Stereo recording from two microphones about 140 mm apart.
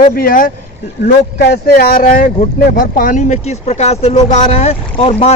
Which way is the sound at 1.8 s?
90° left.